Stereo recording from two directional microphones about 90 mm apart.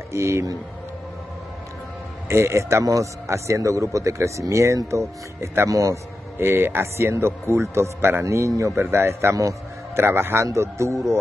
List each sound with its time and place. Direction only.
0.1 s a man's voice: 30° right (ahead or behind)
2.2 s a man's voice: 30° right (ahead or behind)
6.3 s a man's voice: 25° right (ahead or behind)